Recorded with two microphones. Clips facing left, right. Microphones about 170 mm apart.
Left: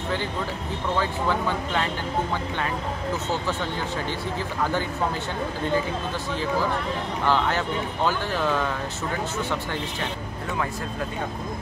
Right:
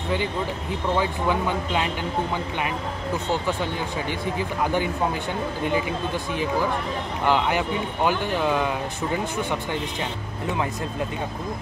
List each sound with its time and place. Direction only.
0.9 s speech: 15° right (ahead or behind)
4.4 s speech: 15° right (ahead or behind)
7.2 s speech: 15° right (ahead or behind)